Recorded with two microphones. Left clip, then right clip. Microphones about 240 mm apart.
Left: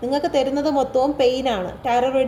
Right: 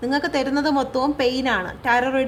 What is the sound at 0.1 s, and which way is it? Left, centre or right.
A woman's voice, right.